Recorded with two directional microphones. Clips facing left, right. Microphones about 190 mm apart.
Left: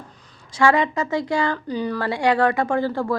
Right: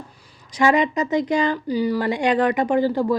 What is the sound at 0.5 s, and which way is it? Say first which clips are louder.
Speech: right 1 dB; 20° right (ahead or behind).